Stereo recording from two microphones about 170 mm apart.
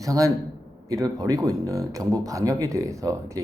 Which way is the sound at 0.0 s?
20° right (ahead or behind).